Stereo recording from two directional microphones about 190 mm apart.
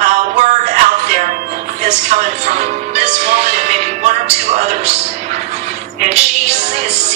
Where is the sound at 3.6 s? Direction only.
40° right (ahead or behind).